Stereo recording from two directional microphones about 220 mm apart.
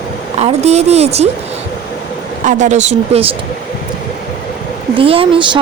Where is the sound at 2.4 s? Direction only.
35° right (ahead or behind).